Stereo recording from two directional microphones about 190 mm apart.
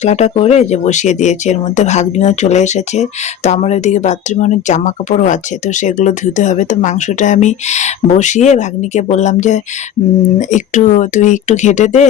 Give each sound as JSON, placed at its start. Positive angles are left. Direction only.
{"t": 0.0, "sound": "speech", "side_deg": 35}